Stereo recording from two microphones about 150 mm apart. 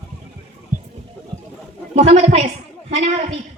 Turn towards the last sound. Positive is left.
turn(degrees=-45)  # may be behind; listen again after turning